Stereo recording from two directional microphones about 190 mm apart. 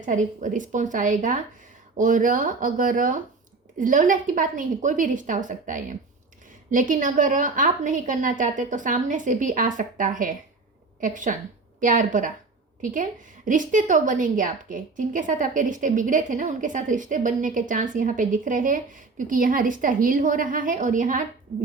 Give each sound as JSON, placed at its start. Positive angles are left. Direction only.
{"t": 0.0, "sound": "a woman's voice", "side_deg": -40}